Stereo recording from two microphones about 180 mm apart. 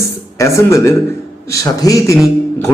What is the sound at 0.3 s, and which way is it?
A man's voice, 15° left (ahead or behind).